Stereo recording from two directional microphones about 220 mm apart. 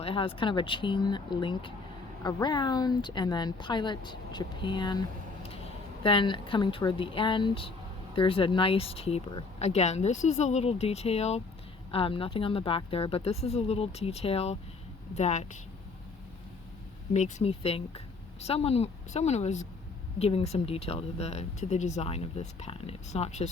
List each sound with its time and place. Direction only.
0.0 s a woman's voice: 25° left (ahead or behind)
17.2 s speech: 30° left (ahead or behind)